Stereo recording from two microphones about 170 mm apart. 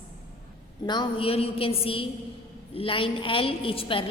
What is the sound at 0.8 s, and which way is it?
A woman's voice, 30° left (ahead or behind).